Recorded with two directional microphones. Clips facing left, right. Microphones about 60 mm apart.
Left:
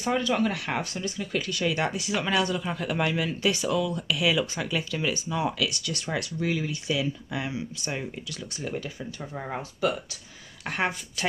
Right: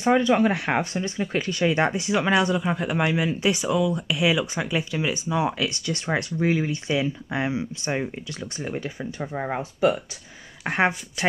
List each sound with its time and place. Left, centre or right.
0.0 s speech: right